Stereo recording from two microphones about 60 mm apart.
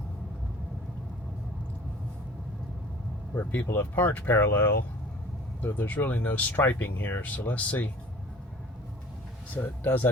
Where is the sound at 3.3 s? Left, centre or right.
Left.